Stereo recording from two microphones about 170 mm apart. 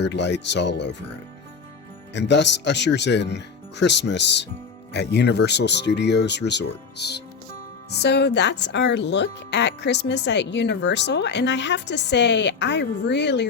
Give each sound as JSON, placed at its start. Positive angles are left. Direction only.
{"t": 0.0, "sound": "speech", "side_deg": 90}
{"t": 2.1, "sound": "speech", "side_deg": 90}
{"t": 4.9, "sound": "speech", "side_deg": 80}